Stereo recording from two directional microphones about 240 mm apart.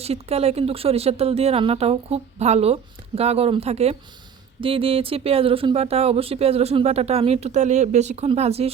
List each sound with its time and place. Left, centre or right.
0.0 s speech: right